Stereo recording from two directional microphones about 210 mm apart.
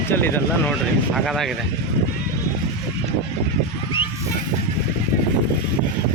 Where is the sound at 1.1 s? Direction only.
Centre (ahead or behind).